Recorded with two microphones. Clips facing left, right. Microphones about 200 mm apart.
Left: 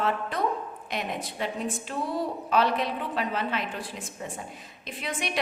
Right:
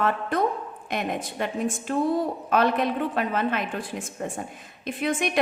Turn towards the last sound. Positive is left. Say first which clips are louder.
# right 7 dB
turn(degrees=-50)  # may be behind; listen again after turning